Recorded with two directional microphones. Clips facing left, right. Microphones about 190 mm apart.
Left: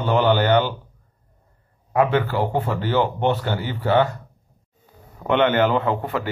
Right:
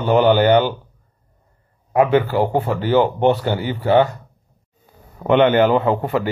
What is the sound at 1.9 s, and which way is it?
A man's voice, 15° right (ahead or behind).